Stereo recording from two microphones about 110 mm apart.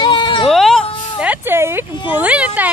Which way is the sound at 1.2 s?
15° right (ahead or behind).